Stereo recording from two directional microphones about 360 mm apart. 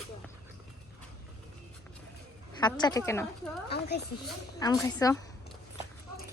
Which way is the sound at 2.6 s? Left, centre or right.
Centre.